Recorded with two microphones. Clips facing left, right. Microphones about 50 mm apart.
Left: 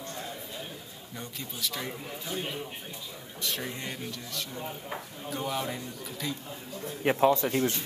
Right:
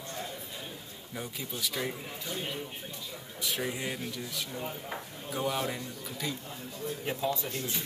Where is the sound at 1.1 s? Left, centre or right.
Centre.